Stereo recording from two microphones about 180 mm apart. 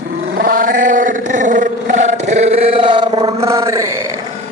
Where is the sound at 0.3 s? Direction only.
55° right (ahead or behind); by 3.3 s 25° right (ahead or behind).